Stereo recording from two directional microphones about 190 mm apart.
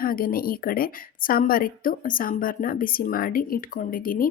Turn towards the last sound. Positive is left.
turn(degrees=50)  # may be behind; listen again after turning